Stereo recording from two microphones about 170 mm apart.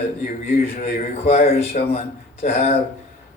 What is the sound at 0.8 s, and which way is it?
Speech, 45° left (ahead or behind).